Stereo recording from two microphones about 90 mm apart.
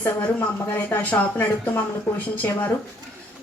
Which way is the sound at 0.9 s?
25° left (ahead or behind).